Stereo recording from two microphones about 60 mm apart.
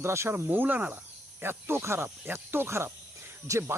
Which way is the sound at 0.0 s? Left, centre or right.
Right.